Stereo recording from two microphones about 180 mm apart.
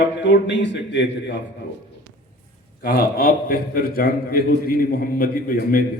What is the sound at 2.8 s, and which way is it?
A man's voice, 55° left (ahead or behind).